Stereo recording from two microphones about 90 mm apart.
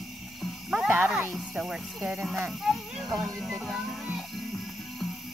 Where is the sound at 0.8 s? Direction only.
20° right (ahead or behind).